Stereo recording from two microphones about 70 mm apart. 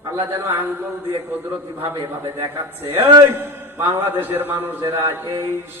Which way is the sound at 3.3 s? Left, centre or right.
Right.